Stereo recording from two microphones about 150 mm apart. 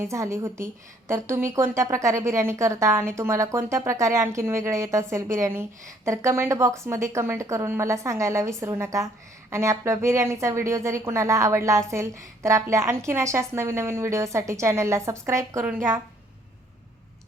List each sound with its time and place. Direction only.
0.0 s a woman's voice: 20° right (ahead or behind)